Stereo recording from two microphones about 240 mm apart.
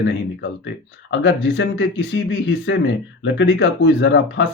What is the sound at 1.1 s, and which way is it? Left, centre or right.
Speech, left.